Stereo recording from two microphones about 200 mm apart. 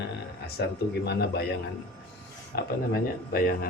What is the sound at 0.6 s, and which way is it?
Speech, 55° left (ahead or behind).